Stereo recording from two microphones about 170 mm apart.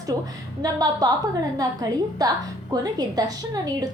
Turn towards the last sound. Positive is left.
turn(degrees=-20)  # may be behind; listen again after turning